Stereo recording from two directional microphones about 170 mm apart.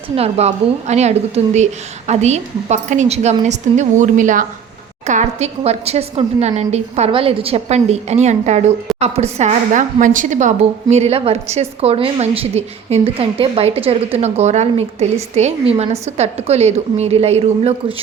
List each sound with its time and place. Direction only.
0.2 s a woman's voice: 40° right (ahead or behind)